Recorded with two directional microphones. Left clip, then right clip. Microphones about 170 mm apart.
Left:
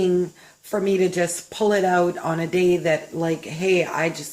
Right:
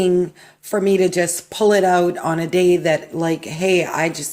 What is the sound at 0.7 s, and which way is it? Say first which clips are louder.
Speech: right 4 dB; 55° right (ahead or behind).